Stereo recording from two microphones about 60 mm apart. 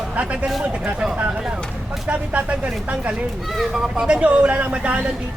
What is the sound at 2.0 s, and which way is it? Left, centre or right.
Speech, right.